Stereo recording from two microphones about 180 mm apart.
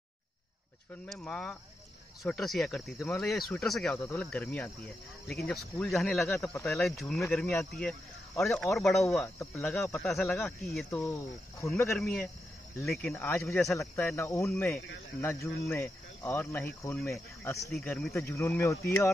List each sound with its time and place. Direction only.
1.0 s speech: 5° left (ahead or behind)
11.0 s speech: 20° left (ahead or behind)
11.8 s speech: centre (ahead or behind)
14.1 s speech: 15° left (ahead or behind)
17.7 s speech: 5° left (ahead or behind)
18.3 s speech: 15° left (ahead or behind)